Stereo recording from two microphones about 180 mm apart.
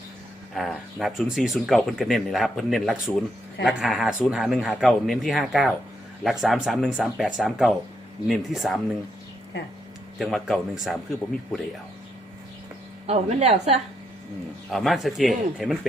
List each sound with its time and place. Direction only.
0.5 s speech: centre (ahead or behind)
10.2 s speech: centre (ahead or behind)
13.1 s speech: 35° right (ahead or behind)
14.7 s speech: centre (ahead or behind)